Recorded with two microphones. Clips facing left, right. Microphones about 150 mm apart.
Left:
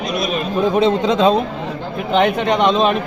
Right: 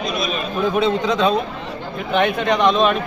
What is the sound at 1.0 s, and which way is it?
Speech, 25° left (ahead or behind).